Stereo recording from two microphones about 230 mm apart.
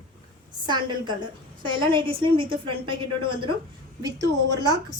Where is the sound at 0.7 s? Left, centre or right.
Centre.